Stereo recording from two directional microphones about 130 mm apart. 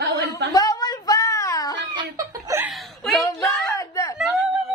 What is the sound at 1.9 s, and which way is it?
Laughter, 30° right (ahead or behind).